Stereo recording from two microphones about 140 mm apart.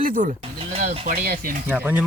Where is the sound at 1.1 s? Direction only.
90° right.